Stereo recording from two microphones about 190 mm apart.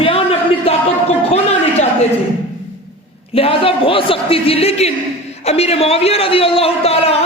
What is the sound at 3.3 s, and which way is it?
A man's voice, 30° left (ahead or behind).